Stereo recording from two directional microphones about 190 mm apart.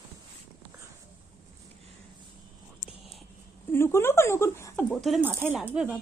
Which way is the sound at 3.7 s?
15° left (ahead or behind).